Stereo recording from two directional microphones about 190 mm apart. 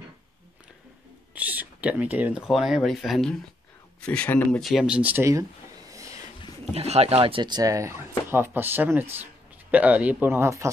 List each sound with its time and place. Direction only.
1.3 s speech: 10° right (ahead or behind)
5.9 s a sound: 15° right (ahead or behind)
6.7 s speech: 35° right (ahead or behind); by 10.7 s 15° right (ahead or behind)